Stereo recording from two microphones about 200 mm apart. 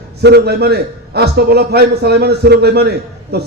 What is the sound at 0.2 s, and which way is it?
A man's voice, 55° right (ahead or behind).